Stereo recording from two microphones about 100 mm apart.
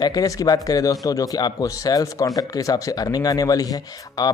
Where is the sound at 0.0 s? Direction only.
35° left (ahead or behind).